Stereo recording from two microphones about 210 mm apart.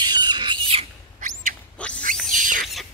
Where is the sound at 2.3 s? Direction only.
40° right (ahead or behind).